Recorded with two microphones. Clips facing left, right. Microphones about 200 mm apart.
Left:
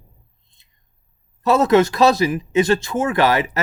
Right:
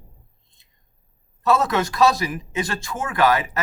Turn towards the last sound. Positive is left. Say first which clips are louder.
# left 3 dB
turn(degrees=25)  # may be behind; listen again after turning